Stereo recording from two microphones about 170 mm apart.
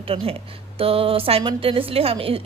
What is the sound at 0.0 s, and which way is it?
A woman's voice, 35° right (ahead or behind).